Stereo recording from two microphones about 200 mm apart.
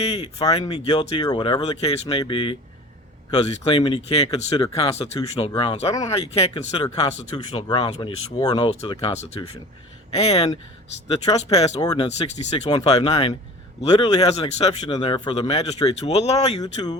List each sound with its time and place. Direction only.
0.0 s speech: 30° left (ahead or behind)
7.3 s speech: 20° left (ahead or behind)
11.1 s speech: 20° left (ahead or behind)
11.5 s speech: 30° left (ahead or behind)
11.8 s speech: 20° left (ahead or behind)
12.0 s speech: 30° left (ahead or behind)
12.6 s speech: 20° left (ahead or behind)
16.6 s speech: 20° left (ahead or behind)